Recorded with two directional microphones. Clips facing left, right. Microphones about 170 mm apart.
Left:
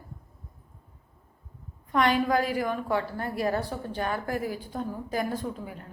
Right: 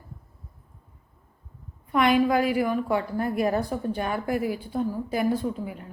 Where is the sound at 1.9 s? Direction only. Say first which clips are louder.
Right 3 dB; 10° right (ahead or behind).